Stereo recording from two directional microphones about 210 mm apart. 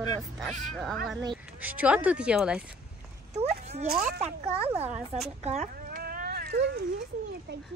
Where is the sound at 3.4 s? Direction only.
30° right (ahead or behind).